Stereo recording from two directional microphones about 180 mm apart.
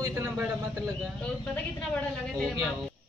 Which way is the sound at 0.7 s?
5° left (ahead or behind).